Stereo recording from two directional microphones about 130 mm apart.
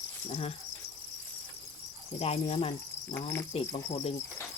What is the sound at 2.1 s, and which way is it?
Speech, 50° left (ahead or behind).